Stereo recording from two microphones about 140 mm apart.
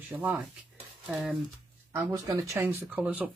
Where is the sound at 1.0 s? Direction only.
Centre (ahead or behind).